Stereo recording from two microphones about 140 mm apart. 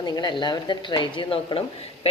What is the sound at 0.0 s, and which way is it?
Speech, 30° left (ahead or behind).